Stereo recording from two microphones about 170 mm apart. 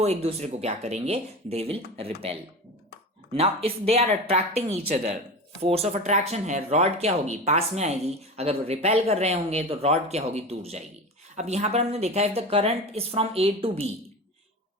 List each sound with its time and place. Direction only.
0.0 s speech: 40° right (ahead or behind)
3.3 s speech: 35° right (ahead or behind)